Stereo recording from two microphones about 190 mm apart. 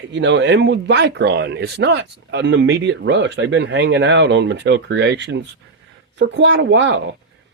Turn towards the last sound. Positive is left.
turn(degrees=-70)  # may be behind; listen again after turning